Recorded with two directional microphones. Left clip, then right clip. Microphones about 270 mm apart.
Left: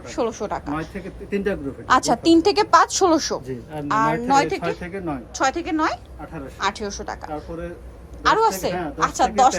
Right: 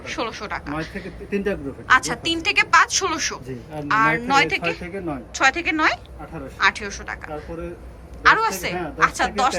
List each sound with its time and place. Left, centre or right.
0.1 s a woman's voice: centre
0.7 s speech: centre
1.9 s a woman's voice: left
3.4 s speech: centre
3.8 s a woman's voice: centre
4.8 s speech: centre
5.3 s a woman's voice: centre
7.3 s speech: centre
8.2 s a woman's voice: centre